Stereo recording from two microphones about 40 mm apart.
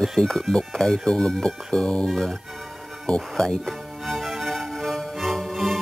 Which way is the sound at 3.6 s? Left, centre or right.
Centre.